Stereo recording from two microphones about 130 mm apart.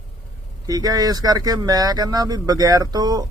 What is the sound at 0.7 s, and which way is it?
Speech, 30° right (ahead or behind).